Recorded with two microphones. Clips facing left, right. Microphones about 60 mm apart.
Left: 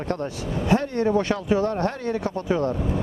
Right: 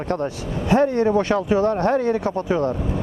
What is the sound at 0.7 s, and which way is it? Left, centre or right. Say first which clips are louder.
Speech: right 4 dB; centre.